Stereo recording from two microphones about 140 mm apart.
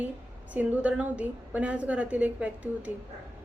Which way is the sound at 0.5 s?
10° right (ahead or behind).